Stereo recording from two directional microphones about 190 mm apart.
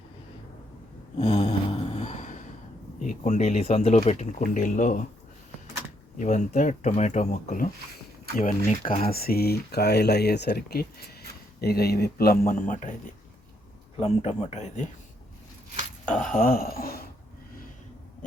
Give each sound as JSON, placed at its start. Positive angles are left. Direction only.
{"t": 1.1, "sound": "mantra", "side_deg": 30}
{"t": 3.0, "sound": "speech", "side_deg": 40}
{"t": 6.1, "sound": "speech", "side_deg": 40}
{"t": 8.4, "sound": "speech", "side_deg": 30}
{"t": 9.0, "sound": "speech", "side_deg": 55}
{"t": 14.0, "sound": "speech", "side_deg": 35}
{"t": 16.0, "sound": "speech", "side_deg": 5}
{"t": 16.3, "sound": "speech", "side_deg": 50}